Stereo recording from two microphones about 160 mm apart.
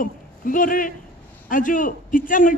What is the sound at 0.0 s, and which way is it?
A man's voice, 60° left (ahead or behind).